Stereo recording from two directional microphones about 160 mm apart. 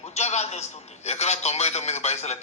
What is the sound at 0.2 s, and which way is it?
A man's voice, 45° left (ahead or behind).